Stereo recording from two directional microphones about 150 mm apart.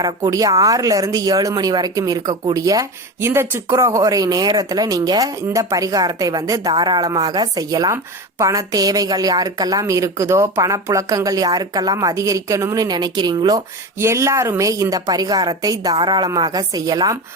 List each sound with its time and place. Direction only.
0.2 s speech: 20° right (ahead or behind)